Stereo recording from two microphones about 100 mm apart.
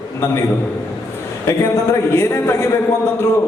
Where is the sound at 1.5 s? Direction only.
25° left (ahead or behind).